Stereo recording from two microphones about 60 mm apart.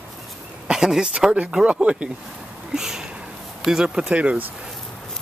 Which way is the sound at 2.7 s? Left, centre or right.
Centre.